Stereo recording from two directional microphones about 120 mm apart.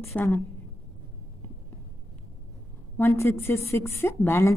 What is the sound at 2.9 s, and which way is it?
A woman's voice, 20° left (ahead or behind).